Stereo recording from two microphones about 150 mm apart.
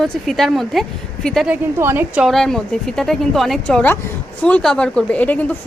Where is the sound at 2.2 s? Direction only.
5° left (ahead or behind).